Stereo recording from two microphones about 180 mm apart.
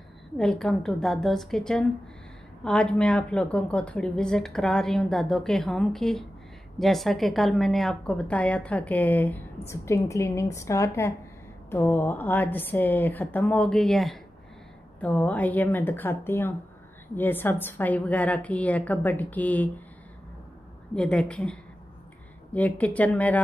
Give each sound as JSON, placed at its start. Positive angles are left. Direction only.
{"t": 0.4, "sound": "a woman's voice", "side_deg": 5}
{"t": 20.9, "sound": "a woman's voice", "side_deg": 5}